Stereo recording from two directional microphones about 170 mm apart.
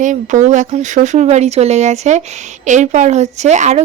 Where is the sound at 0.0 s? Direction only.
45° right (ahead or behind).